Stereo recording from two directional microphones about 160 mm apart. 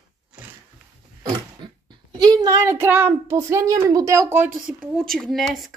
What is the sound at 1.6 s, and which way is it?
A child's voice, 25° right (ahead or behind).